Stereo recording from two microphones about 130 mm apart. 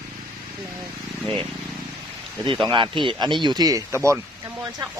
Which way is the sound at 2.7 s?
40° right (ahead or behind).